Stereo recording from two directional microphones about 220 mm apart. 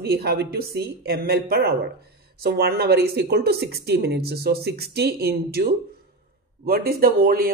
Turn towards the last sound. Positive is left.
turn(degrees=-40)  # may be behind; listen again after turning